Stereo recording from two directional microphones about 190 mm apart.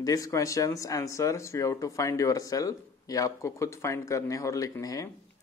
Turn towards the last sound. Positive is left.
turn(degrees=20)  # may be behind; listen again after turning